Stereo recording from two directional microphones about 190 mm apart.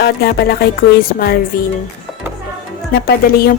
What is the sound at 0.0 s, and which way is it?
Speech, 60° left (ahead or behind).